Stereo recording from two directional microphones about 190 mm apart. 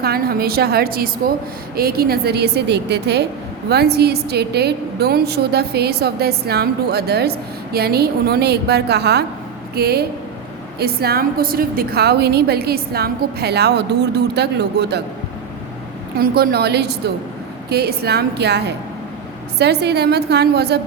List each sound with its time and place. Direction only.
0.0 s a woman's voice: 55° right (ahead or behind)
16.1 s a woman's voice: 50° right (ahead or behind)